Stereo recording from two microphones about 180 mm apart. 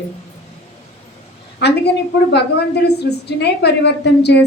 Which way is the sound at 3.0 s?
65° left (ahead or behind).